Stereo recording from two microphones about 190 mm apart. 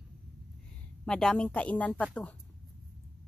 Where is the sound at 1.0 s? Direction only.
5° left (ahead or behind).